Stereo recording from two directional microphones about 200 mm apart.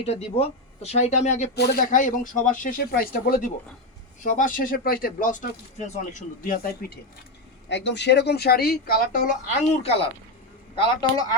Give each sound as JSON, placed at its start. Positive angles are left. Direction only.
{"t": 0.0, "sound": "speech", "side_deg": 30}
{"t": 1.5, "sound": "speech", "side_deg": 50}
{"t": 7.7, "sound": "speech", "side_deg": 60}
{"t": 9.5, "sound": "speech", "side_deg": 30}